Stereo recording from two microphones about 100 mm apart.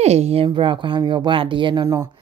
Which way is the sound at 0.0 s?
90° right.